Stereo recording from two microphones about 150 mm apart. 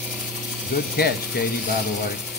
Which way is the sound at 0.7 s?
90° left.